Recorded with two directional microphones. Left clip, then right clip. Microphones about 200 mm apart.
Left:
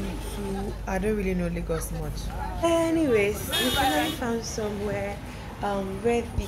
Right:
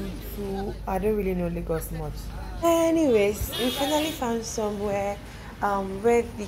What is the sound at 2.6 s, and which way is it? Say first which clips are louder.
Speech: right 2 dB; 25° right (ahead or behind).